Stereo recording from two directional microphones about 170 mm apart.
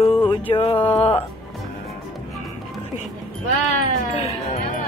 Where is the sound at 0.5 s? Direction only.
30° left (ahead or behind).